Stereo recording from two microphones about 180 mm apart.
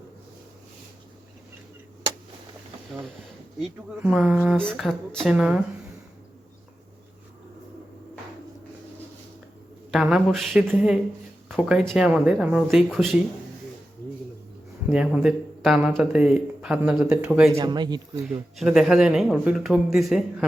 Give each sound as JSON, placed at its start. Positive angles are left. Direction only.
{"t": 3.6, "sound": "speech", "side_deg": -5}
{"t": 9.9, "sound": "speech", "side_deg": -5}
{"t": 14.8, "sound": "speech", "side_deg": -5}
{"t": 17.6, "sound": "speech", "side_deg": -25}
{"t": 18.5, "sound": "speech", "side_deg": 0}